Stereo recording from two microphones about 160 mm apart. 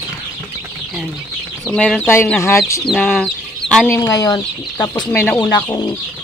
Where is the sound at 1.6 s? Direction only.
Centre (ahead or behind).